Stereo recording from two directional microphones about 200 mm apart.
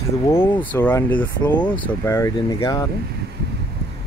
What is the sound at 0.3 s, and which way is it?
Speech, 10° left (ahead or behind).